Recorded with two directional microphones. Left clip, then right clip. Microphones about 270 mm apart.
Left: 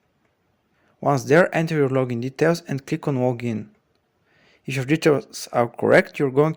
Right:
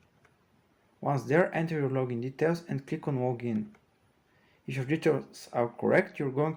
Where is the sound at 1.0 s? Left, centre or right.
Left.